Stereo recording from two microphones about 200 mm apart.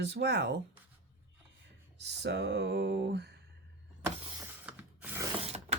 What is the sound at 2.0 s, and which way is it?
Speech, 60° right (ahead or behind).